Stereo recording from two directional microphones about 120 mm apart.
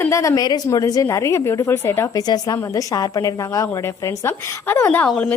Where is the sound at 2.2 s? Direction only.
35° left (ahead or behind).